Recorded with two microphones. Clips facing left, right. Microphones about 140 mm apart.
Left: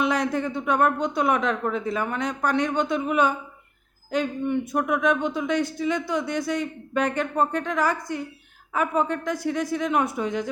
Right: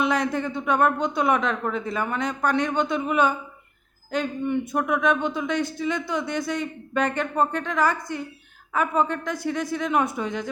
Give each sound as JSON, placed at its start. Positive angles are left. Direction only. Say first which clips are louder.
{"t": 0.0, "sound": "speech", "louder": "even", "side_deg": 5}